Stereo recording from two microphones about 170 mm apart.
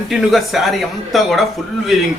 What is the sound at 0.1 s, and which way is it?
Speech, centre (ahead or behind).